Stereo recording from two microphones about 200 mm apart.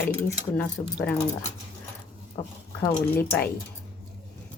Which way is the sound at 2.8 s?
10° left (ahead or behind).